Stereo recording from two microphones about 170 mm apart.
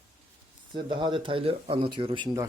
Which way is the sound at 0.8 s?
30° right (ahead or behind).